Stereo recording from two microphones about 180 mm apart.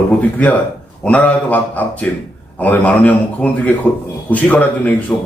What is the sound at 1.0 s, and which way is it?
Speech, 5° left (ahead or behind).